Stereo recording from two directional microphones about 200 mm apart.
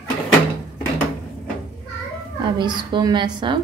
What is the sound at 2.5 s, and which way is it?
A woman's voice, 20° right (ahead or behind).